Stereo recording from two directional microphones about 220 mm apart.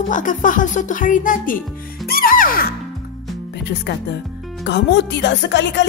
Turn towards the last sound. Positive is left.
turn(degrees=55)  # may be behind; listen again after turning